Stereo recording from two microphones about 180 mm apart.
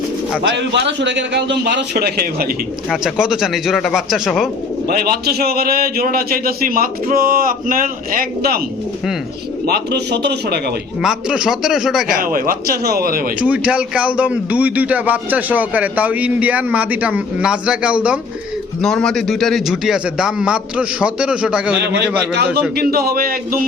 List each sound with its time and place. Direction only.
0.4 s a man's voice: 75° right (ahead or behind)
2.9 s a man's voice: 5° right (ahead or behind)
4.9 s a man's voice: 60° right (ahead or behind)
9.6 s a man's voice: 65° right (ahead or behind)
11.0 s a man's voice: 5° right (ahead or behind)
12.1 s a man's voice: 50° right (ahead or behind)
13.4 s a man's voice: 10° right (ahead or behind)
21.8 s a man's voice: 70° right (ahead or behind); by 23.6 s 55° right (ahead or behind)